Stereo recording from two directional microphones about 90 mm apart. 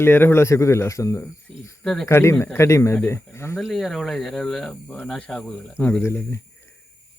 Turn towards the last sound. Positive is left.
turn(degrees=30)  # may be behind; listen again after turning